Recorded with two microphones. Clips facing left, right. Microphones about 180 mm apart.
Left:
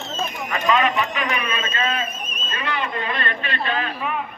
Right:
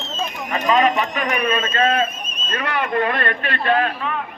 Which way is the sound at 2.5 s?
60° right (ahead or behind).